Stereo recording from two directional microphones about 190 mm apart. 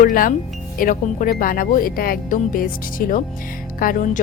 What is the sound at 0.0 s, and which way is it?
Speech, 45° left (ahead or behind).